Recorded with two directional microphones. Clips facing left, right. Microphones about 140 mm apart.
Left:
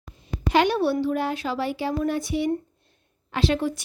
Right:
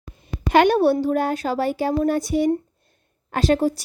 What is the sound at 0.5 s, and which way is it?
Speech, 50° right (ahead or behind).